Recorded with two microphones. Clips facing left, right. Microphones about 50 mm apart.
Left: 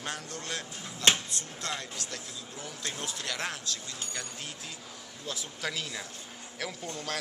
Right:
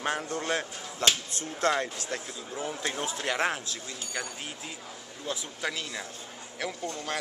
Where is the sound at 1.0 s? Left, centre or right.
Left.